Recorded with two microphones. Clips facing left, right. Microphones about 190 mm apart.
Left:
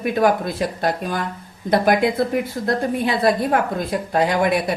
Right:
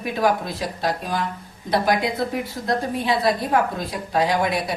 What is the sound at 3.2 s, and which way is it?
A woman's voice, 55° left (ahead or behind).